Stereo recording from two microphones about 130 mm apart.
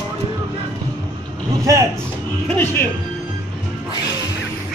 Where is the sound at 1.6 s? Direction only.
25° right (ahead or behind).